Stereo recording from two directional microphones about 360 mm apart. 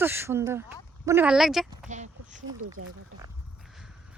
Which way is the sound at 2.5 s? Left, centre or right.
Right.